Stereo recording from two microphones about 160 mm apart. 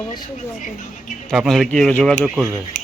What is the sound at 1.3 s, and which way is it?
Speech, centre (ahead or behind).